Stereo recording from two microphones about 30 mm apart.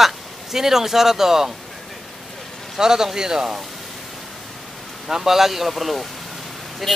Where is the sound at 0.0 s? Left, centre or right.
Centre.